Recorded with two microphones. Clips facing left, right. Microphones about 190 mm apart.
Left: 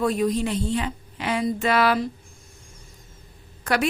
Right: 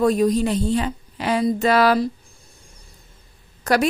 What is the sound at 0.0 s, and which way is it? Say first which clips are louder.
A woman's voice: right 5 dB; 40° right (ahead or behind).